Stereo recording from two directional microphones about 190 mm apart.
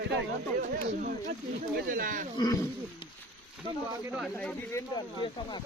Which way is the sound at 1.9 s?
45° right (ahead or behind).